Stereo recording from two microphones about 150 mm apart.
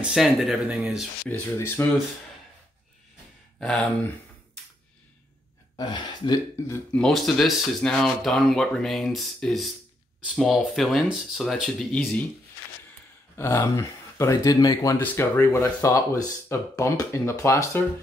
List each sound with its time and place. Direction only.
0.0 s speech: centre (ahead or behind)
1.3 s speech: 15° left (ahead or behind)
3.5 s speech: 5° left (ahead or behind)
5.8 s speech: 30° left (ahead or behind)
6.9 s speech: 5° left (ahead or behind)
13.4 s speech: 20° left (ahead or behind)